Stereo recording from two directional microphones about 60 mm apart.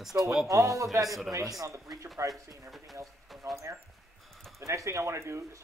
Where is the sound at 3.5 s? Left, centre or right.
Right.